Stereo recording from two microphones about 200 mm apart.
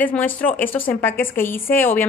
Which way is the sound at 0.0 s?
10° left (ahead or behind).